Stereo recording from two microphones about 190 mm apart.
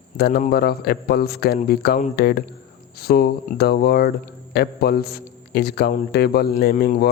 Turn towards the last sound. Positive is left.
turn(degrees=50)  # may be behind; listen again after turning